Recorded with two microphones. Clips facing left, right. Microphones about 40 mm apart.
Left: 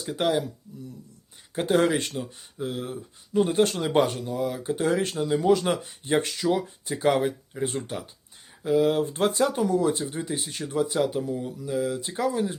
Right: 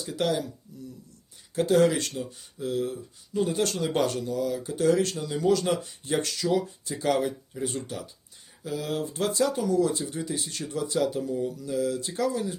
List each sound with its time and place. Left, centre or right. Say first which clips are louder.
0.1 s speech: left 3 dB; left
1.5 s speech: right 1 dB; left